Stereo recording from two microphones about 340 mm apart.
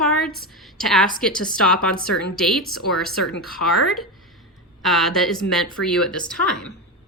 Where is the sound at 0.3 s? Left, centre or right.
Centre.